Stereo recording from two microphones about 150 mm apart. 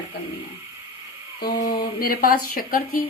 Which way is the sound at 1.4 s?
85° left.